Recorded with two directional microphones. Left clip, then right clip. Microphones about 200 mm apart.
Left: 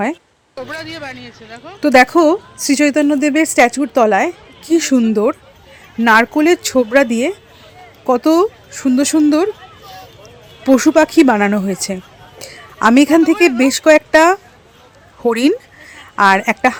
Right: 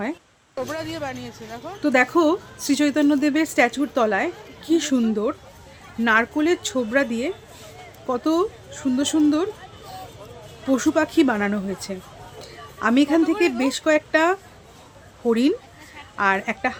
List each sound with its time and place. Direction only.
0.7 s speech: 10° right (ahead or behind)
1.8 s a woman's voice: 30° left (ahead or behind)
10.7 s speech: 35° left (ahead or behind)
12.4 s a sound: 40° left (ahead or behind)
13.6 s speech: 35° left (ahead or behind)